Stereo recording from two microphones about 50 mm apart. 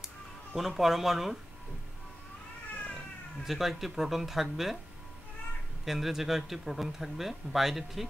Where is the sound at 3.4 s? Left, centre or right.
Centre.